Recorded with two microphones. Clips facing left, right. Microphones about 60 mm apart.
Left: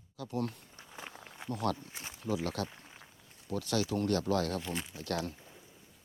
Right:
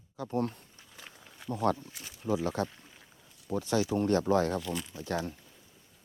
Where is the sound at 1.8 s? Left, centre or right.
Left.